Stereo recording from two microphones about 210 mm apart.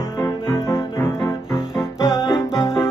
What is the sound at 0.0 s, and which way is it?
Music, 15° left (ahead or behind).